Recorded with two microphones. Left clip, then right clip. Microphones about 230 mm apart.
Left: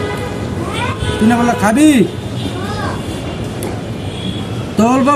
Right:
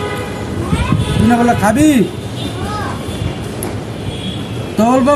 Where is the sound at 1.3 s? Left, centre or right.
Centre.